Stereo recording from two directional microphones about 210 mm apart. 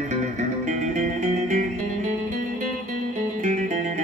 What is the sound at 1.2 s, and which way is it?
Music, 35° right (ahead or behind).